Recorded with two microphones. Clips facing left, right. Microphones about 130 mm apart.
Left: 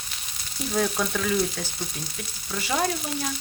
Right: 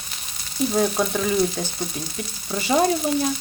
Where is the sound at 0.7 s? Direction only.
30° right (ahead or behind).